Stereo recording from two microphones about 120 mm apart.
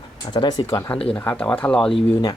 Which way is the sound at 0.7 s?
20° left (ahead or behind).